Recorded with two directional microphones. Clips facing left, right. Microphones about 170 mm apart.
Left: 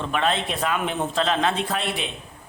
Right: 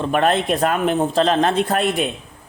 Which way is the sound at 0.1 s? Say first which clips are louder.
Right 7 dB; 50° right (ahead or behind).